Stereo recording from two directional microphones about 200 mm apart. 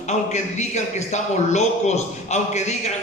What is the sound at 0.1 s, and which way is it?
A man's voice, 35° left (ahead or behind).